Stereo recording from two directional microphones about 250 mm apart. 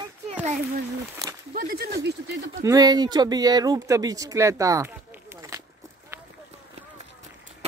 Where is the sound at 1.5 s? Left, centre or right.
Right.